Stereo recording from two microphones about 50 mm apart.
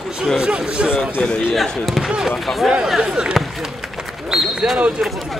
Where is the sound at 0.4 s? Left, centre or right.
Right.